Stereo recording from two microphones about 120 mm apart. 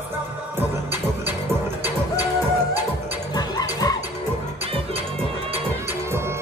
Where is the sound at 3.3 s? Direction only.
30° left (ahead or behind).